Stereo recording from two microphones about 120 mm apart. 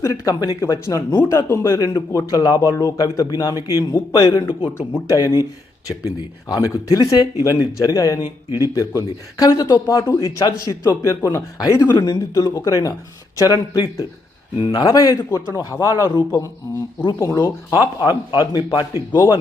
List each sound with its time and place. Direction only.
0.0 s a man's voice: 25° left (ahead or behind)